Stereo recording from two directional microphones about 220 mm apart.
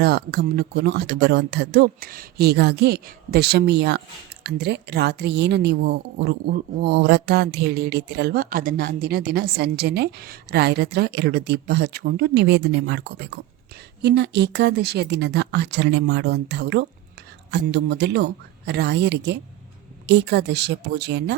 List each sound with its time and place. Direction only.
0.0 s a woman's voice: 45° right (ahead or behind)